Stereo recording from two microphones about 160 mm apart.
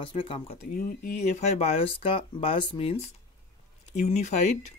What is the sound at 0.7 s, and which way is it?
Speech, 65° left (ahead or behind).